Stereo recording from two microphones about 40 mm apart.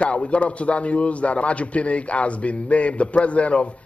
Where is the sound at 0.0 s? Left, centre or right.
Left.